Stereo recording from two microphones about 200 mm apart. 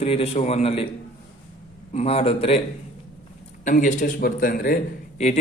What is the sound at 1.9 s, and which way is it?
Speech, 30° left (ahead or behind).